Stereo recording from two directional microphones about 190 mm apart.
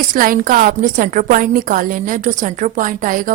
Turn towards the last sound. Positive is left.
turn(degrees=-45)  # may be behind; listen again after turning